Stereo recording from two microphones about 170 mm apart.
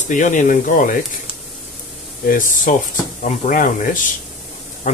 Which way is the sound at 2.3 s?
50° left (ahead or behind).